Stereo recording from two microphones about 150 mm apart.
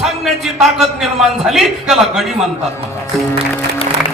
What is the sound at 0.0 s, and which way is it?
A man's voice, centre (ahead or behind).